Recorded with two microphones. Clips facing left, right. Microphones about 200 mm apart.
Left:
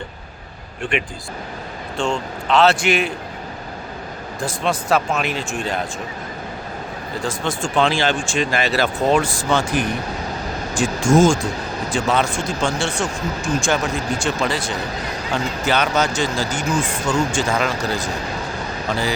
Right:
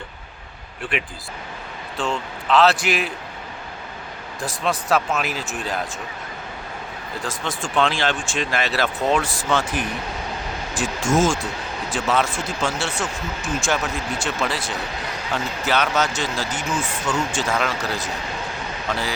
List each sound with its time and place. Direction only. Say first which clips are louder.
0.8 s speech: left 4 dB; centre (ahead or behind)
4.4 s speech: left 2 dB; centre (ahead or behind)
7.3 s speech: left 5 dB; centre (ahead or behind)